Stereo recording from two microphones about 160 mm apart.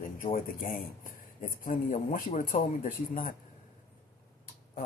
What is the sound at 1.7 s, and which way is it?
Speech, 55° left (ahead or behind).